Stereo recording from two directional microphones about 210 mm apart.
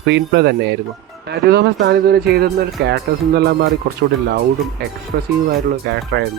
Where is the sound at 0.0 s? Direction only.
55° right (ahead or behind).